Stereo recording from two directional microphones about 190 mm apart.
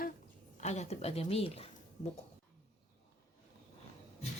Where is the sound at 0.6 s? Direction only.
35° left (ahead or behind).